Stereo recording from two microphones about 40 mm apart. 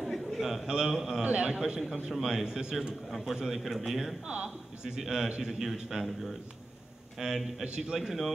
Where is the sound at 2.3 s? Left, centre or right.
Centre.